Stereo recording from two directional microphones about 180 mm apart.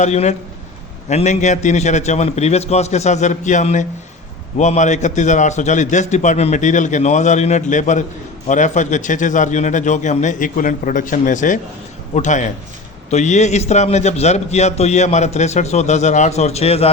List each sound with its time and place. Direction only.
0.0 s a man's voice: 40° left (ahead or behind)